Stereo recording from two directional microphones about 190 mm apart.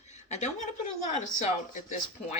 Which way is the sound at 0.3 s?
40° left (ahead or behind).